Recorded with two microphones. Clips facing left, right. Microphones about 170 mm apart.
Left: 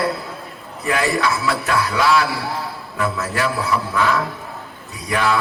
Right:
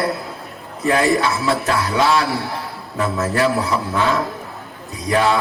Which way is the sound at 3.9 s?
25° right (ahead or behind).